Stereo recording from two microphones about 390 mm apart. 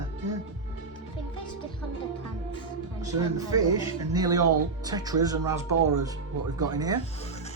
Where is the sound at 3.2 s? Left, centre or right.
Centre.